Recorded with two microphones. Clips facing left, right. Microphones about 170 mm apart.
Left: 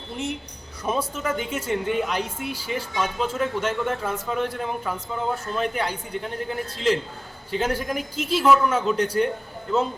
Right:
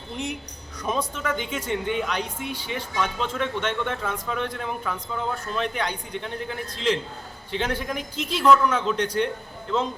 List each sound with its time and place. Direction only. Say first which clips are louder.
0.9 s speech: left 1 dB; 5° left (ahead or behind)